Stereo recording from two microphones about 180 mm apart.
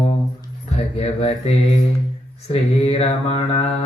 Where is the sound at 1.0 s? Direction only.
35° left (ahead or behind).